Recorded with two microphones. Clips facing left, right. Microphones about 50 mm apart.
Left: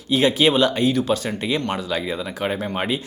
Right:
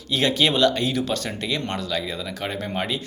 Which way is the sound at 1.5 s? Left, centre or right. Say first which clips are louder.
Left 3 dB; centre.